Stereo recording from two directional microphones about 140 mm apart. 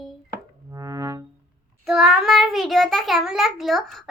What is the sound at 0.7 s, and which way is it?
Music, 25° right (ahead or behind).